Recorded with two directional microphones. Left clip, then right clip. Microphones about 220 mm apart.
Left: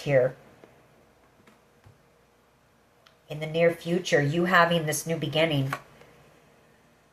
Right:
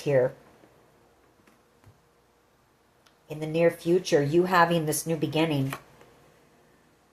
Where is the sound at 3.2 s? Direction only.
40° right (ahead or behind).